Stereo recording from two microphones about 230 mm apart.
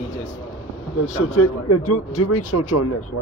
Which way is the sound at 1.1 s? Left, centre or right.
Left.